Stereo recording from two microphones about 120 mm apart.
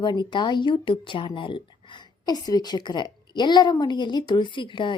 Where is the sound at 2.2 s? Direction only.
35° left (ahead or behind).